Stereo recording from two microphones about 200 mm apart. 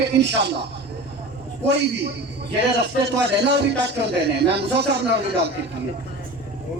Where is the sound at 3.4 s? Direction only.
60° right (ahead or behind).